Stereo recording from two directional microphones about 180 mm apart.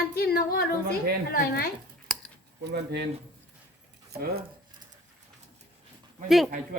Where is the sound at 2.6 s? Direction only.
70° right (ahead or behind).